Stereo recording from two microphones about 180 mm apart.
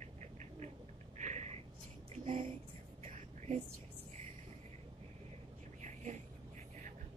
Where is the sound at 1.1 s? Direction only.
40° right (ahead or behind).